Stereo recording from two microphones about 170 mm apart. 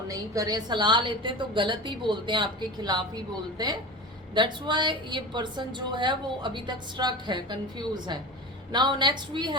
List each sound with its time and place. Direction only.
0.1 s a woman's voice: 20° right (ahead or behind)
4.4 s a woman's voice: 25° right (ahead or behind)